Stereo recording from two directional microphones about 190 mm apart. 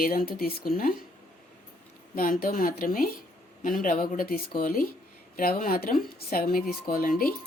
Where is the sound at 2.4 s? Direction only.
50° left (ahead or behind).